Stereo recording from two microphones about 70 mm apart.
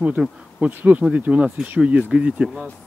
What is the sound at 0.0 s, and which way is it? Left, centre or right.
Speech, centre.